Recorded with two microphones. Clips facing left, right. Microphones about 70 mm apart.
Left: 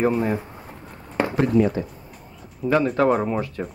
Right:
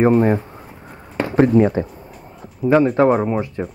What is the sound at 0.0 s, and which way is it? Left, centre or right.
Speech, right.